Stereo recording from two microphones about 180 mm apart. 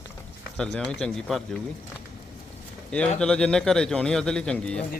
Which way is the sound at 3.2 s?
5° left (ahead or behind).